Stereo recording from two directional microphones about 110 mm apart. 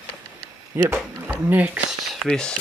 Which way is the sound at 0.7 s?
20° right (ahead or behind).